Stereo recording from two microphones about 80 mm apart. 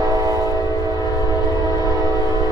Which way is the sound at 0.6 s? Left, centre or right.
Left.